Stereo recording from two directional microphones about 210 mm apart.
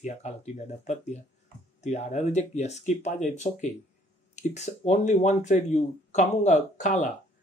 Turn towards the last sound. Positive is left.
turn(degrees=35)  # may be behind; listen again after turning